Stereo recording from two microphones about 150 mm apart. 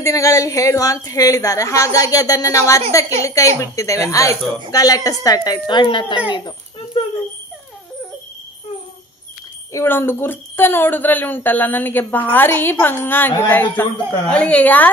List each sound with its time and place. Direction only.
0.0 s speech: 20° left (ahead or behind)
9.7 s a woman's voice: 15° left (ahead or behind)